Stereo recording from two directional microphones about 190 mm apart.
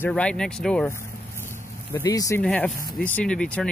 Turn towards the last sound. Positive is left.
turn(degrees=5)  # may be behind; listen again after turning